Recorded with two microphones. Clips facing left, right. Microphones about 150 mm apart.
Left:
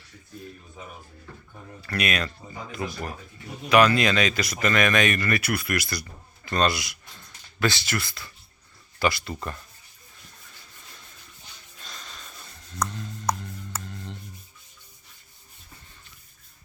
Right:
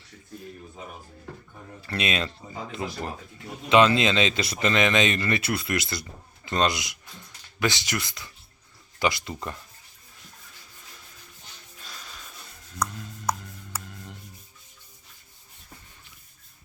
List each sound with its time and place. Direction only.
1.9 s speech: 25° right (ahead or behind)
11.8 s music: 10° right (ahead or behind)